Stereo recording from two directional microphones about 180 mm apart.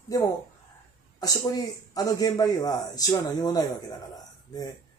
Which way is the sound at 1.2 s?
20° left (ahead or behind).